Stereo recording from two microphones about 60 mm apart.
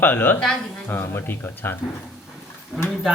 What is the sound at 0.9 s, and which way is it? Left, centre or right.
Speech, left.